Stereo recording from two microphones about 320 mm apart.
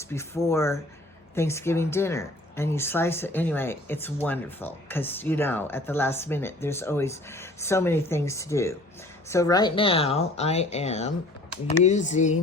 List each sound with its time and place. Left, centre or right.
0.0 s speech: centre